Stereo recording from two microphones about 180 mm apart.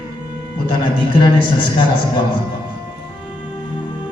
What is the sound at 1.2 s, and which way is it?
Speech, 25° left (ahead or behind).